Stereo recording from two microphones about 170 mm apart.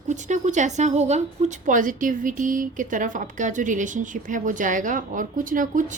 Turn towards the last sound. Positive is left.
turn(degrees=-50)  # may be behind; listen again after turning